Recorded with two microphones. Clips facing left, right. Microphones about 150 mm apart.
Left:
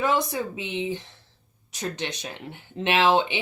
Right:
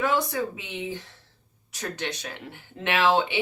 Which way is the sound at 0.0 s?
20° left (ahead or behind).